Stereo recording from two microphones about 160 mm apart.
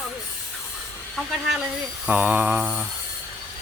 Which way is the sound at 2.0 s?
10° right (ahead or behind).